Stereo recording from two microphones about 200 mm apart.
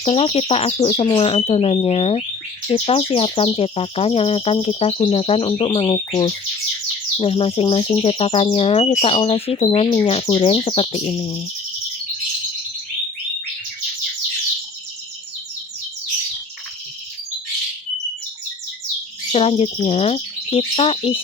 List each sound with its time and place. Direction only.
0.0 s chirp: 30° left (ahead or behind)
19.3 s speech: 30° left (ahead or behind)